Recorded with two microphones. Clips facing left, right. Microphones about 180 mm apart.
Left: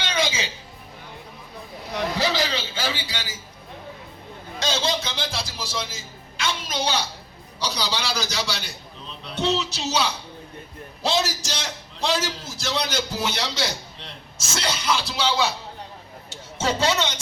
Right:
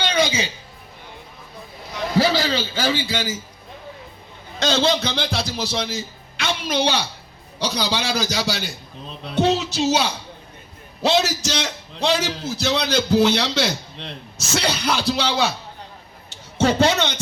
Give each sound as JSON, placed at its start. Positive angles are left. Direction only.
{"t": 0.1, "sound": "music", "side_deg": -35}
{"t": 2.1, "sound": "a man's voice", "side_deg": -40}
{"t": 4.6, "sound": "a man's voice", "side_deg": -65}
{"t": 11.0, "sound": "a man's voice", "side_deg": -60}